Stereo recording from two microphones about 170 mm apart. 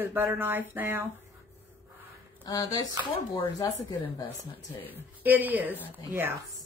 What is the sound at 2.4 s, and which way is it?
Speech, 20° left (ahead or behind).